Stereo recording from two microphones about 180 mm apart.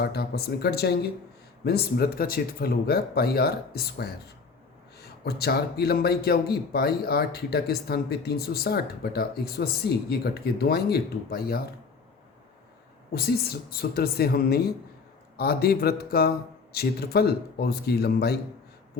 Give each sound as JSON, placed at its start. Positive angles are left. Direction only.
{"t": 0.0, "sound": "speech", "side_deg": 60}
{"t": 13.1, "sound": "speech", "side_deg": 60}